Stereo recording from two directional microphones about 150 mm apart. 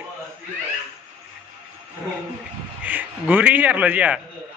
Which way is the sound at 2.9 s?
10° right (ahead or behind).